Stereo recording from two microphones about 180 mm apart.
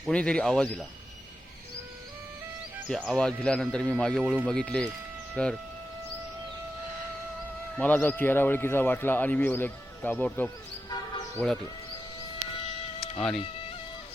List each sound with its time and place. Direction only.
0.0 s speech: 5° left (ahead or behind)
2.9 s speech: centre (ahead or behind)
4.2 s speech: 10° right (ahead or behind)
4.4 s speech: 5° left (ahead or behind)
7.8 s speech: 5° left (ahead or behind)
13.1 s speech: 5° left (ahead or behind)